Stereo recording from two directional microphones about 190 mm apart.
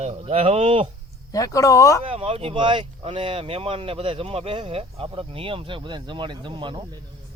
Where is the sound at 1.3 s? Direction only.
20° left (ahead or behind).